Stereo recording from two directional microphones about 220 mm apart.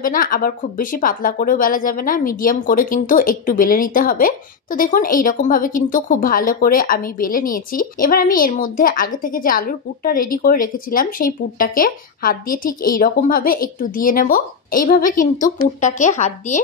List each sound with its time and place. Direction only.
0.0 s speech: 40° left (ahead or behind)